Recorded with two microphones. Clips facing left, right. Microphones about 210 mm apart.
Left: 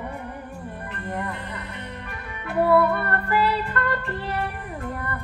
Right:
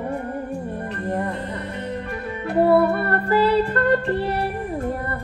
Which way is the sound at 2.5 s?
30° right (ahead or behind).